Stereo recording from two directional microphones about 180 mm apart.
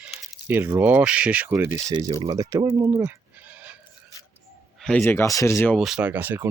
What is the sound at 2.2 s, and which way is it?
Speech, 20° right (ahead or behind).